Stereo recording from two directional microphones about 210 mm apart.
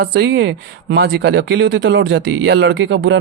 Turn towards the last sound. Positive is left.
turn(degrees=-60)  # may be behind; listen again after turning